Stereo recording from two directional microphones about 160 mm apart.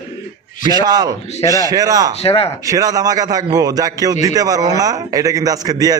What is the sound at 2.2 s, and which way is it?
Speech, 35° left (ahead or behind).